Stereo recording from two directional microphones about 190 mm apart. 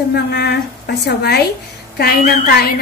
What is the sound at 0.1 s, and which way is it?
A woman's voice, 60° left (ahead or behind).